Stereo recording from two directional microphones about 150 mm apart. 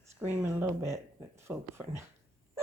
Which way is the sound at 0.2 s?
15° right (ahead or behind).